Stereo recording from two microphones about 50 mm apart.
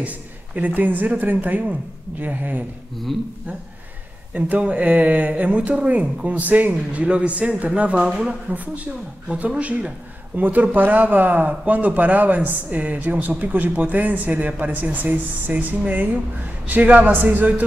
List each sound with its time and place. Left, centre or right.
0.6 s speech: right
3.1 s speech: centre
4.3 s speech: right; by 8.4 s centre
8.5 s speech: right